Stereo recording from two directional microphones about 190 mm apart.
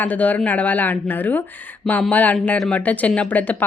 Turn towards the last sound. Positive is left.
turn(degrees=10)  # may be behind; listen again after turning